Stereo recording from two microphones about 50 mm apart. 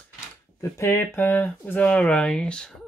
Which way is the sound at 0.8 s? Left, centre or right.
Left.